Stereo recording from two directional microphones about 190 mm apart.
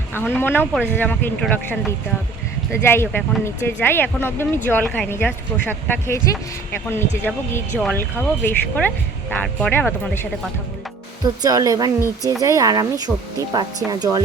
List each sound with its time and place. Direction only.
0.1 s speech: 10° left (ahead or behind)
11.4 s speech: 20° right (ahead or behind)